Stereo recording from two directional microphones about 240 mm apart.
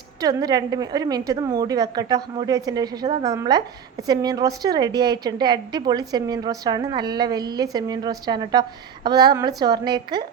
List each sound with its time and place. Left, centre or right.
0.2 s a woman's voice: centre